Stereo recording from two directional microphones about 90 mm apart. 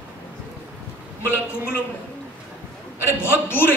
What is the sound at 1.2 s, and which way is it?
Speech, 25° left (ahead or behind).